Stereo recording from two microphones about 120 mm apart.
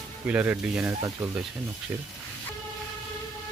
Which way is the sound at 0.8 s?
20° right (ahead or behind).